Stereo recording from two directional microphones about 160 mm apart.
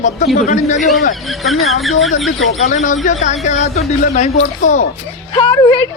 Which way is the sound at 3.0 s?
45° left (ahead or behind).